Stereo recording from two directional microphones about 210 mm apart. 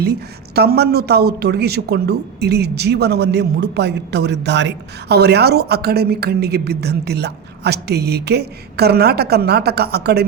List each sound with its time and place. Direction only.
0.0 s speech: 50° right (ahead or behind)